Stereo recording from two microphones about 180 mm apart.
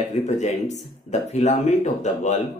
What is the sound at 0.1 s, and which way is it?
Speech, 40° left (ahead or behind).